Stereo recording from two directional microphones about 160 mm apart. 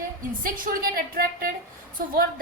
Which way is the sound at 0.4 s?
60° right (ahead or behind).